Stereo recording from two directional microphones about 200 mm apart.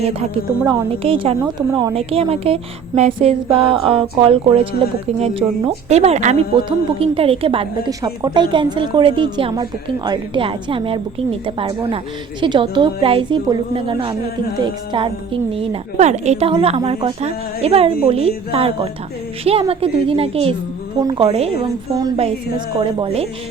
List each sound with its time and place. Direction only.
0.7 s a woman's voice: 25° right (ahead or behind)
21.9 s a woman's voice: 20° right (ahead or behind)
22.2 s a woman's voice: 30° right (ahead or behind)